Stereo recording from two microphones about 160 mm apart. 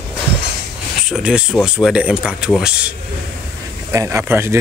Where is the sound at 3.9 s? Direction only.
20° right (ahead or behind).